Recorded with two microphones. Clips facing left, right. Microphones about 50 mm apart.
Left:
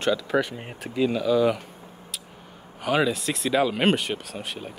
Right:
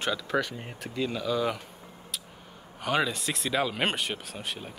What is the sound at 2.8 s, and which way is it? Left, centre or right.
Speech, centre.